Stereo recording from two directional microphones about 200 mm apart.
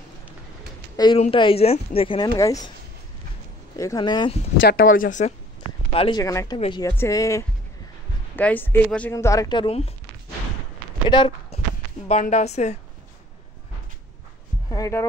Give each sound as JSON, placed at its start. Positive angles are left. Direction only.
{"t": 0.9, "sound": "a woman's voice", "side_deg": 20}
{"t": 3.7, "sound": "a woman's voice", "side_deg": 20}
{"t": 4.6, "sound": "speech", "side_deg": 45}
{"t": 5.9, "sound": "a woman's voice", "side_deg": 25}
{"t": 11.1, "sound": "speech", "side_deg": 25}
{"t": 12.1, "sound": "a woman's voice", "side_deg": 35}
{"t": 14.7, "sound": "speech", "side_deg": 15}